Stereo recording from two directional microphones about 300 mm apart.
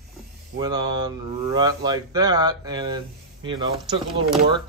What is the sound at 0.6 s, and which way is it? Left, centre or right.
Speech, centre.